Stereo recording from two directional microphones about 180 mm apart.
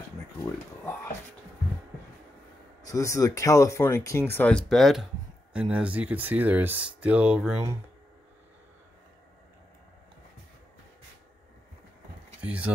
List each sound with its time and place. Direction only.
2.8 s speech: 15° left (ahead or behind); by 7.6 s 5° right (ahead or behind)
12.4 s speech: 5° right (ahead or behind)